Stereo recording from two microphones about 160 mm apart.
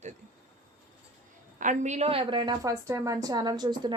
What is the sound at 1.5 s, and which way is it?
Speech, 50° right (ahead or behind).